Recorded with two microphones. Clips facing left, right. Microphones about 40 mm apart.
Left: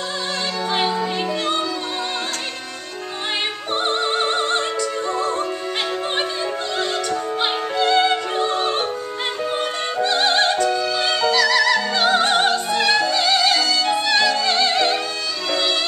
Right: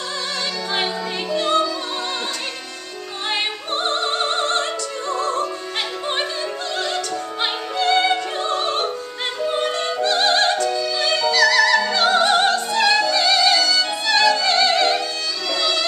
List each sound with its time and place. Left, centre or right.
1.3 s music: centre
3.7 s opera: centre
7.4 s opera: centre
9.5 s music: centre
11.3 s opera: centre
13.7 s music: centre
15.5 s music: centre